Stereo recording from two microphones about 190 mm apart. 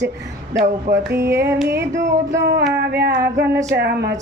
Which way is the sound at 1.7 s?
60° right (ahead or behind).